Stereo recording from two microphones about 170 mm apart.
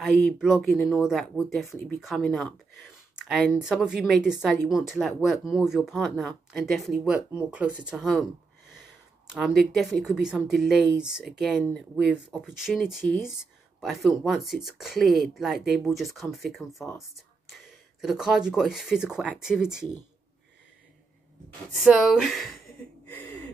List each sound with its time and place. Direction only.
0.0 s speech: centre (ahead or behind)
9.3 s speech: centre (ahead or behind)
21.7 s speech: centre (ahead or behind)